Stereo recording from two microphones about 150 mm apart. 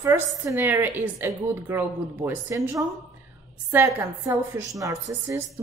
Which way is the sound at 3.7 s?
15° right (ahead or behind).